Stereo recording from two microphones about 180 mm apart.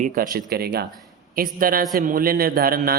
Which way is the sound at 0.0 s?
55° right (ahead or behind).